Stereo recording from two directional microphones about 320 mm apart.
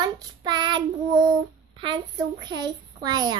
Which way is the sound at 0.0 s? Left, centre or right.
Centre.